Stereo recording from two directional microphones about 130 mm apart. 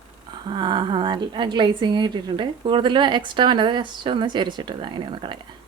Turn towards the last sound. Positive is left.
turn(degrees=-40)  # may be behind; listen again after turning